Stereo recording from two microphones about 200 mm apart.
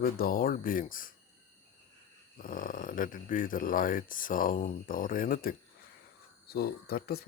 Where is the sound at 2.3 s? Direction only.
45° left (ahead or behind).